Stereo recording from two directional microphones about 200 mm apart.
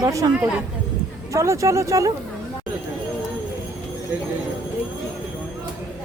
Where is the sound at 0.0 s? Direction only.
15° right (ahead or behind).